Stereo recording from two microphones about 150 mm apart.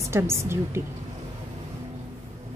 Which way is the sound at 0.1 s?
15° right (ahead or behind).